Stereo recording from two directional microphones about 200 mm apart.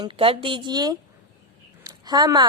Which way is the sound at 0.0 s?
25° right (ahead or behind).